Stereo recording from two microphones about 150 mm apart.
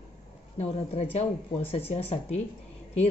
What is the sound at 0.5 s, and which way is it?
Speech, 40° left (ahead or behind).